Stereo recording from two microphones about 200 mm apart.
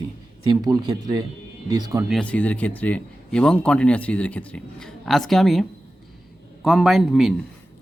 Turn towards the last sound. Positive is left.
turn(degrees=0)  # may be behind; listen again after turning